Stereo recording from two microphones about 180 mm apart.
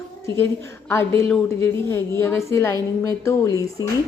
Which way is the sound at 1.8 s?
15° left (ahead or behind).